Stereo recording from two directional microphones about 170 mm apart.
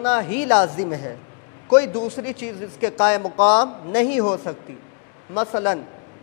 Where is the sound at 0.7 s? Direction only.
20° left (ahead or behind).